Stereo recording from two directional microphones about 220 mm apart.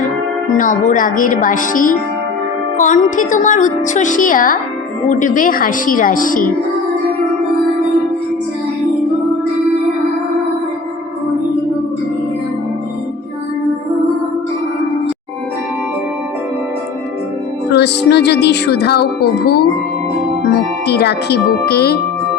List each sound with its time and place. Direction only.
0.5 s a woman's voice: 35° left (ahead or behind)
17.7 s speech: 50° left (ahead or behind)
20.8 s speech: 50° left (ahead or behind)